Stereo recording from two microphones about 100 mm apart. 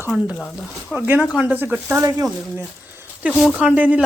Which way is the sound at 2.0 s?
35° right (ahead or behind).